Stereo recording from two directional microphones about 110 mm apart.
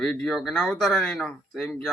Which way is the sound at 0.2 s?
5° left (ahead or behind).